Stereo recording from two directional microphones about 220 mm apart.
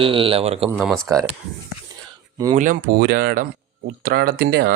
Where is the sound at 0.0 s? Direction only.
25° right (ahead or behind).